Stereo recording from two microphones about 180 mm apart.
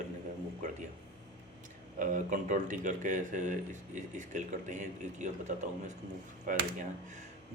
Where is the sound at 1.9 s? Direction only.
45° right (ahead or behind).